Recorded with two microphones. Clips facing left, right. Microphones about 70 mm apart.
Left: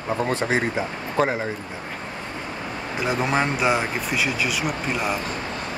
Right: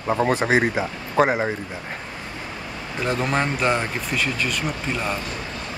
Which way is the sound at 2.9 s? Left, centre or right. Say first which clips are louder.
Even; centre.